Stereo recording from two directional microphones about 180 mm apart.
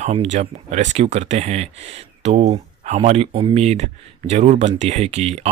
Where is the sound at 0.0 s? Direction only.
40° right (ahead or behind).